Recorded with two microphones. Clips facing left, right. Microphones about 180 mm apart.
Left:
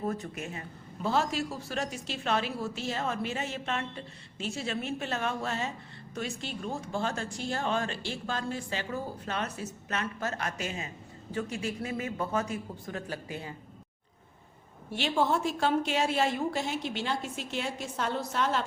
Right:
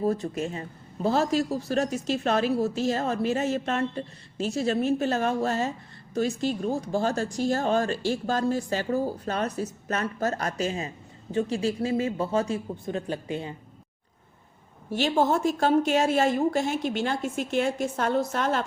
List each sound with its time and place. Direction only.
0.1 s speech: 30° right (ahead or behind)
14.8 s a woman's voice: 40° right (ahead or behind)